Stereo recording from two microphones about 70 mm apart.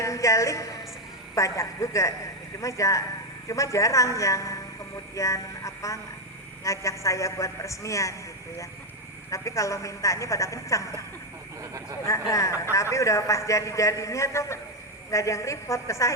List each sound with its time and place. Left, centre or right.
0.0 s a woman's voice: left
9.3 s a man's voice: left
11.6 s a sound: right
12.0 s a man's voice: left